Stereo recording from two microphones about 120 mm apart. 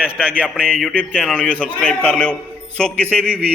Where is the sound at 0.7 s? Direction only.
10° left (ahead or behind).